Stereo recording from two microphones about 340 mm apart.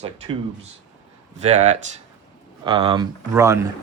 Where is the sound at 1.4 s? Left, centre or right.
Centre.